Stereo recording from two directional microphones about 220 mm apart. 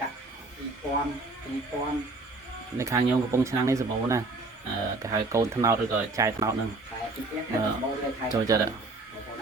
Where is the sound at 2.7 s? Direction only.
15° right (ahead or behind).